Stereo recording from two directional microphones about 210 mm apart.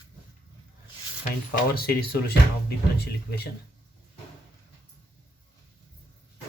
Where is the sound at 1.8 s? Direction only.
45° left (ahead or behind).